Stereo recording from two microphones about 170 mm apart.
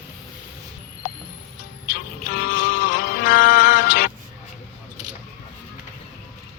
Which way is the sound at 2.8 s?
55° left (ahead or behind).